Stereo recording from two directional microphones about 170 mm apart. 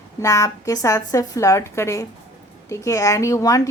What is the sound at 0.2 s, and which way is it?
A woman's voice, 20° left (ahead or behind).